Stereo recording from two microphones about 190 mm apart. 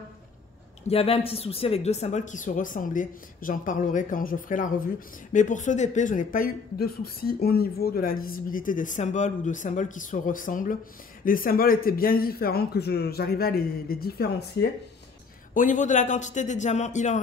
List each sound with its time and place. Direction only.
0.8 s speech: 30° left (ahead or behind); by 14.7 s 55° left (ahead or behind)
15.5 s a man's voice: 40° left (ahead or behind)